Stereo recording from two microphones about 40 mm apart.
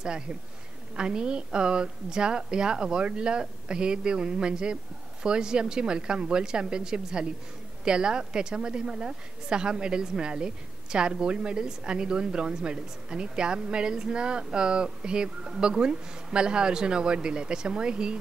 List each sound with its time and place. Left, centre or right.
0.0 s a woman's voice: centre